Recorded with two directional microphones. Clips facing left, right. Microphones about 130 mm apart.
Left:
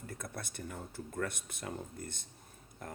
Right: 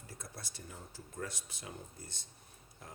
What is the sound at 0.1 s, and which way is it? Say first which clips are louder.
Speech: left 5 dB; 55° left (ahead or behind).